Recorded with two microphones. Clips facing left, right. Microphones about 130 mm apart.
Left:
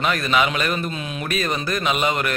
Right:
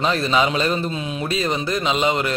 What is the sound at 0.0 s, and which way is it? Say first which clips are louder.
A man's voice: right 1 dB; 30° right (ahead or behind).